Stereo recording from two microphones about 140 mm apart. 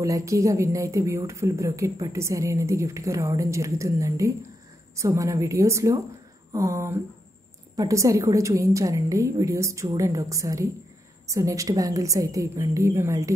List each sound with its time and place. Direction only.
0.0 s speech: 20° right (ahead or behind)